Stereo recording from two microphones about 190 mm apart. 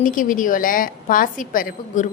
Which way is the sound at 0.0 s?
45° left (ahead or behind).